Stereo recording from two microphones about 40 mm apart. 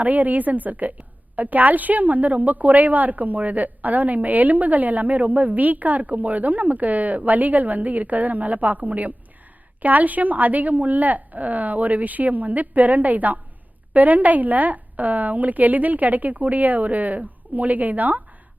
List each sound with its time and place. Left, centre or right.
0.0 s a woman's voice: right